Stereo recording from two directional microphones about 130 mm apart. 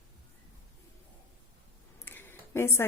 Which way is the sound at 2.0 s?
15° left (ahead or behind).